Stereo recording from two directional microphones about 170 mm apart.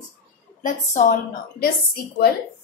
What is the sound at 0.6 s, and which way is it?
Speech, 50° left (ahead or behind).